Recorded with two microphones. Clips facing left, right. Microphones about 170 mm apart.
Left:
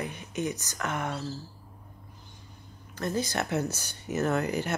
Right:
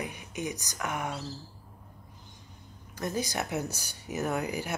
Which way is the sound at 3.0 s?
15° right (ahead or behind).